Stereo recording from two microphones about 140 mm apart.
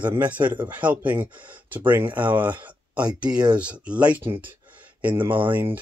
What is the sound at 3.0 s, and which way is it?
Speech, 30° right (ahead or behind).